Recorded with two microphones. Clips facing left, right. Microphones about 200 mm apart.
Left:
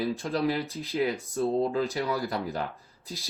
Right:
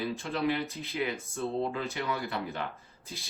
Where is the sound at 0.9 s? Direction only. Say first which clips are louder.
Left 7 dB; 35° left (ahead or behind).